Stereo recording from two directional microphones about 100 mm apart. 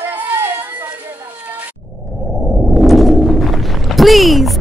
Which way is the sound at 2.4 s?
Centre (ahead or behind).